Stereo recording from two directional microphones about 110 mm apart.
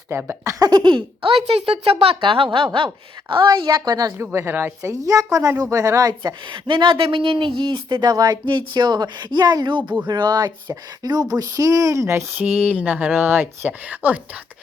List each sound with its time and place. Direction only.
0.1 s speech: 20° right (ahead or behind)
0.6 s speech: 40° right (ahead or behind)
6.7 s speech: 45° right (ahead or behind); by 12.5 s 25° right (ahead or behind)
12.5 s speech: 10° right (ahead or behind)